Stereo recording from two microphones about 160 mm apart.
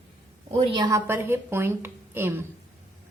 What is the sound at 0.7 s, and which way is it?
A woman's voice, 20° right (ahead or behind).